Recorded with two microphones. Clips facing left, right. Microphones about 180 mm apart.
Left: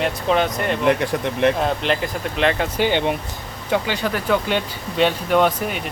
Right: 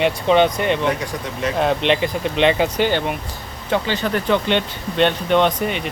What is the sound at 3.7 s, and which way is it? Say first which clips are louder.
Speech: right 1 dB; 10° left (ahead or behind).